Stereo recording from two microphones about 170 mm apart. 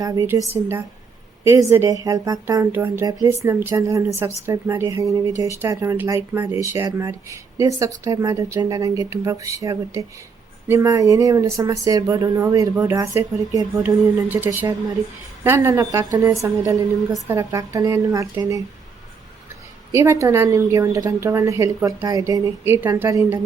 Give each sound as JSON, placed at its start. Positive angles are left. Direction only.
{"t": 0.0, "sound": "speech", "side_deg": -20}
{"t": 19.9, "sound": "speech", "side_deg": -15}